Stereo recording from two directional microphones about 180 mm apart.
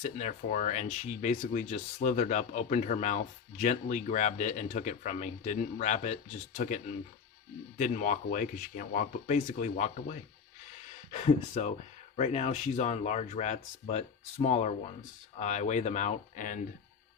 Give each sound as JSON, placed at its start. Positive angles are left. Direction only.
{"t": 0.0, "sound": "speech", "side_deg": 40}
{"t": 7.8, "sound": "speech", "side_deg": 45}
{"t": 11.1, "sound": "speech", "side_deg": 40}